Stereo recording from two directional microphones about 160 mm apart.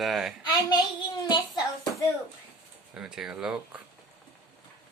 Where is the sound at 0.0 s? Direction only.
Centre (ahead or behind).